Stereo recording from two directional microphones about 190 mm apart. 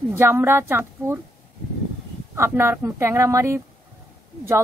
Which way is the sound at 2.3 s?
15° right (ahead or behind).